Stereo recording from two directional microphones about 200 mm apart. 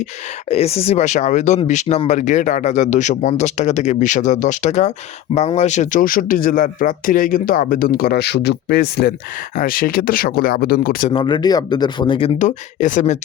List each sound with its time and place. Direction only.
0.5 s speech: 30° left (ahead or behind); by 11.1 s 45° left (ahead or behind)
11.1 s speech: 25° left (ahead or behind)
12.4 s speech: 40° left (ahead or behind)